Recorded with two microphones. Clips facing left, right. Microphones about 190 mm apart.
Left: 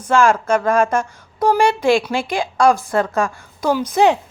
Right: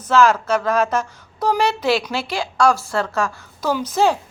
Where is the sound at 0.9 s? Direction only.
10° left (ahead or behind).